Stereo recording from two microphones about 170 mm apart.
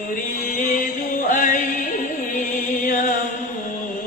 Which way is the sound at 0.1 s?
50° left (ahead or behind).